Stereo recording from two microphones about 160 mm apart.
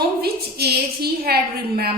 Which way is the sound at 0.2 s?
80° right.